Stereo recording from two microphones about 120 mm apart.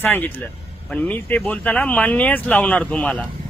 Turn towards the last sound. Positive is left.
turn(degrees=10)  # may be behind; listen again after turning